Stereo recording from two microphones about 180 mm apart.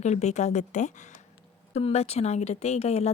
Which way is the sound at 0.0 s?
40° left (ahead or behind).